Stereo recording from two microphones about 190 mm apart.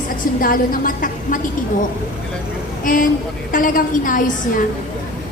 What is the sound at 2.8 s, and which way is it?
A woman's voice, 45° left (ahead or behind).